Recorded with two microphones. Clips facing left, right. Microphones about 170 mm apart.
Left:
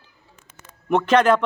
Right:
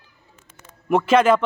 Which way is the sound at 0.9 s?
5° right (ahead or behind).